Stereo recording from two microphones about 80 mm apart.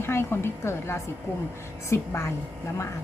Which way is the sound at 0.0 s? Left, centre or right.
Left.